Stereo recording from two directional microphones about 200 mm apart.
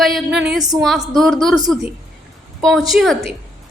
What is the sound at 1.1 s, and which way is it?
Speech, centre (ahead or behind).